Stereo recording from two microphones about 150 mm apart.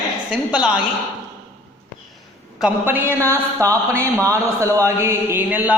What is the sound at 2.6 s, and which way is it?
A man's voice, 10° right (ahead or behind).